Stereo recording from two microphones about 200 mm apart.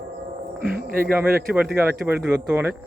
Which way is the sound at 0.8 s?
45° right (ahead or behind).